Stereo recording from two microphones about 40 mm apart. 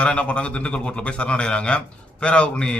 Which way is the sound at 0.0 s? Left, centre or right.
Left.